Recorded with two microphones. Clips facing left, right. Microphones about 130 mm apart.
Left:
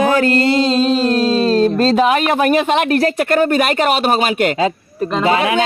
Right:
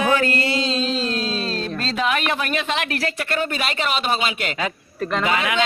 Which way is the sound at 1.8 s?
40° left (ahead or behind).